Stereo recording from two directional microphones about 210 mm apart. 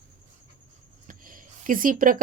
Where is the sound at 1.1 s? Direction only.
40° right (ahead or behind).